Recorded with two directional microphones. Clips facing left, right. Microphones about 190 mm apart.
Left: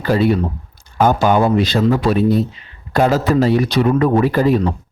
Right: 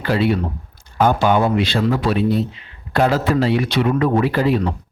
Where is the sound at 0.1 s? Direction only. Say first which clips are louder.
Left 3 dB; 45° left (ahead or behind).